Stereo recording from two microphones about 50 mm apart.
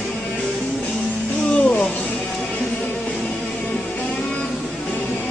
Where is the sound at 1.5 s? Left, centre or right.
Left.